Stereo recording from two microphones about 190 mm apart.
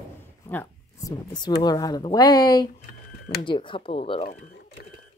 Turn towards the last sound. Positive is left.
turn(degrees=35)  # may be behind; listen again after turning